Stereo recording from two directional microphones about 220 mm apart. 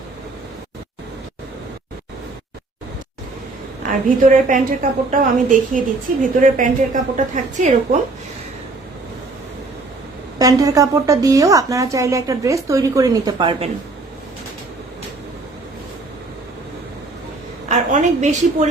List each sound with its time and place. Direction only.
3.8 s a woman's voice: 35° right (ahead or behind)
10.3 s a woman's voice: 15° right (ahead or behind)
17.7 s a woman's voice: 35° right (ahead or behind)